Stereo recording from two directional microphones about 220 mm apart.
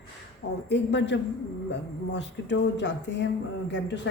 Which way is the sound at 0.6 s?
55° left (ahead or behind).